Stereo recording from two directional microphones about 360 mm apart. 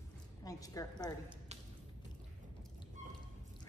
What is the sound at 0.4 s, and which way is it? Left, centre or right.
Speech, centre.